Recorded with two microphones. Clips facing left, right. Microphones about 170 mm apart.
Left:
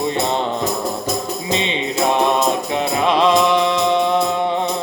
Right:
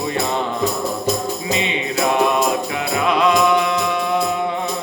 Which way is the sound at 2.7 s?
30° left (ahead or behind).